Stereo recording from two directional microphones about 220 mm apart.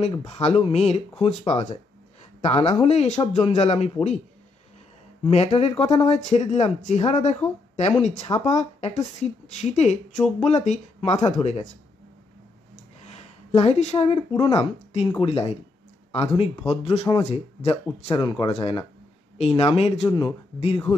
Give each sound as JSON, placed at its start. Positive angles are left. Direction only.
{"t": 0.0, "sound": "speech", "side_deg": 25}
{"t": 5.2, "sound": "speech", "side_deg": 25}
{"t": 13.0, "sound": "speech", "side_deg": 30}